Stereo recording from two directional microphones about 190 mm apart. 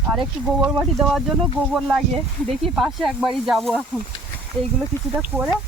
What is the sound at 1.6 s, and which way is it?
Speech, 5° left (ahead or behind).